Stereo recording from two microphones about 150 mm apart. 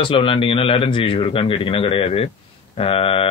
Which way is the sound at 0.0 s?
35° left (ahead or behind).